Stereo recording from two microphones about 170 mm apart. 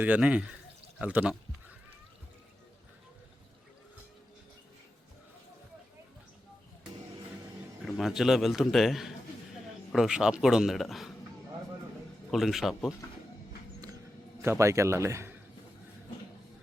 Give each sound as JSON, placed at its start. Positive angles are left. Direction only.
{"t": 0.0, "sound": "a man's voice", "side_deg": -10}
{"t": 7.9, "sound": "a man's voice", "side_deg": 0}
{"t": 12.3, "sound": "a man's voice", "side_deg": 0}
{"t": 14.4, "sound": "a man's voice", "side_deg": -15}